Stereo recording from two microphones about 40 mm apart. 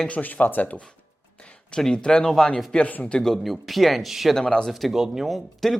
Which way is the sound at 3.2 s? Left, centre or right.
Centre.